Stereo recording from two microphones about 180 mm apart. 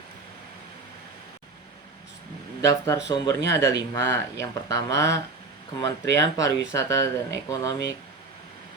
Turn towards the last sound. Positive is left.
turn(degrees=20)  # may be behind; listen again after turning